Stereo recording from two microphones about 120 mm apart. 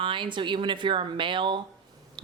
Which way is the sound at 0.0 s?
45° right (ahead or behind).